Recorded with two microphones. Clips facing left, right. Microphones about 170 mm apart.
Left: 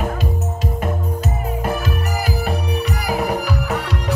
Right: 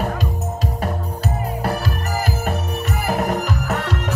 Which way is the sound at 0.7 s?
35° right (ahead or behind).